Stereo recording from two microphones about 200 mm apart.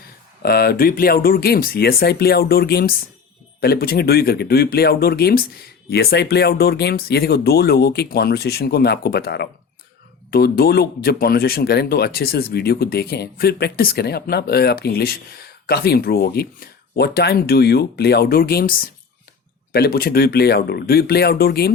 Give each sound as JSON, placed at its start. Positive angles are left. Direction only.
{"t": 0.4, "sound": "speech", "side_deg": 50}